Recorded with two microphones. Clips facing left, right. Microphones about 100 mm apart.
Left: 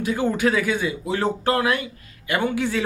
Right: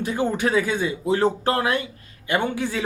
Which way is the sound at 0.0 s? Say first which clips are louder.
Left 2 dB; 20° right (ahead or behind).